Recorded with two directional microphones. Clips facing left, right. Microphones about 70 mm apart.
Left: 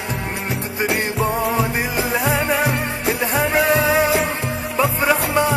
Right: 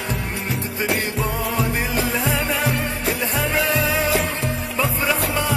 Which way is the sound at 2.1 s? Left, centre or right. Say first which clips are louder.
Left 3 dB; left.